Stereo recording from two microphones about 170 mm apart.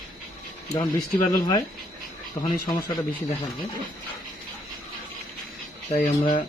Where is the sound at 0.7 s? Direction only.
20° left (ahead or behind).